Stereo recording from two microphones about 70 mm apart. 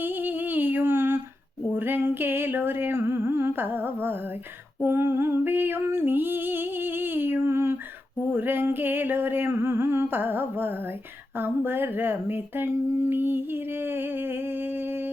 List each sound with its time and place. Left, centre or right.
0.0 s humming: right
4.8 s female singing: right
8.3 s humming: right